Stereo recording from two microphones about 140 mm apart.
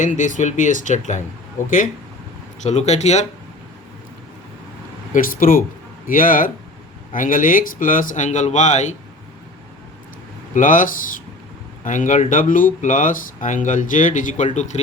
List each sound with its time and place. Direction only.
0.0 s speech: 65° left (ahead or behind)
2.6 s speech: 55° left (ahead or behind)
5.1 s speech: 85° left
6.1 s speech: 75° left (ahead or behind); by 9.0 s 55° left (ahead or behind)
10.5 s speech: 70° left (ahead or behind)